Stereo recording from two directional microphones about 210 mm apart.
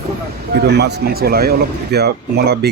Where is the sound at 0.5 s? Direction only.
50° right (ahead or behind).